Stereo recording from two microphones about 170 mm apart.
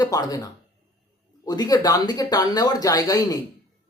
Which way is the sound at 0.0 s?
25° left (ahead or behind).